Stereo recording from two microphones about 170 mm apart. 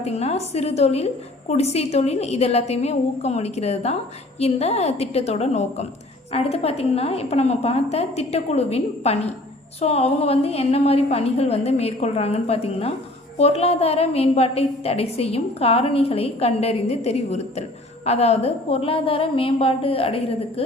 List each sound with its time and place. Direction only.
0.0 s a woman's voice: 40° left (ahead or behind)